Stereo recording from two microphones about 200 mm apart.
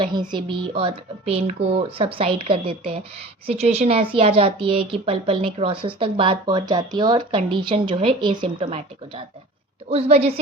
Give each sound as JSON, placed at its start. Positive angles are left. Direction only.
{"t": 0.0, "sound": "a woman's voice", "side_deg": -20}